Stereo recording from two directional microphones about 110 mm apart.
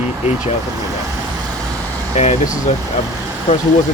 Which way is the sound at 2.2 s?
90° left.